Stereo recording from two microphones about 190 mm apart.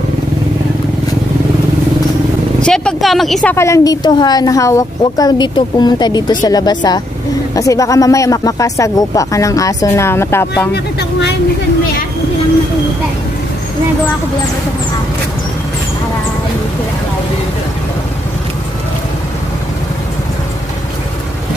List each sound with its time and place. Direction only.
2.6 s a sound: 5° left (ahead or behind)
3.5 s a woman's voice: 15° left (ahead or behind)
10.7 s speech: 60° left (ahead or behind)